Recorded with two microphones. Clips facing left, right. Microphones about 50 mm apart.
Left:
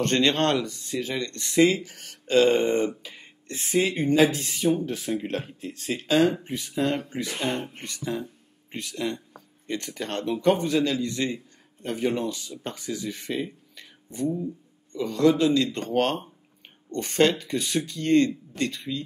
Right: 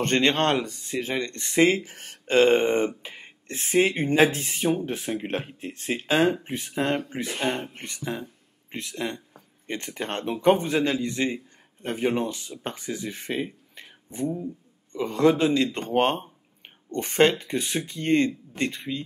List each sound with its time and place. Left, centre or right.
0.0 s a man's voice: right